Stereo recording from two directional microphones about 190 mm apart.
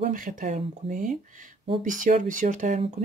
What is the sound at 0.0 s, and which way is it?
Speech, 45° right (ahead or behind).